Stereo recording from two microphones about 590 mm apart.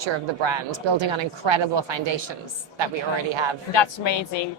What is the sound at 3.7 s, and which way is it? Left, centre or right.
Speech, left.